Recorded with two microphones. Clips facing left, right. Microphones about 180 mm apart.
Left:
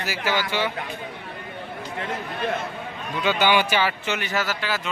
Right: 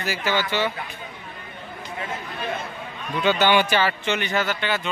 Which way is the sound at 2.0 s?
55° left (ahead or behind).